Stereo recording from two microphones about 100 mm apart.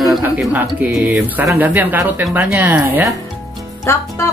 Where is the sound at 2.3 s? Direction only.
15° right (ahead or behind).